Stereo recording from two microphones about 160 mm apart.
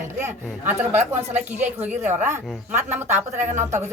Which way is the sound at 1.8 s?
10° right (ahead or behind).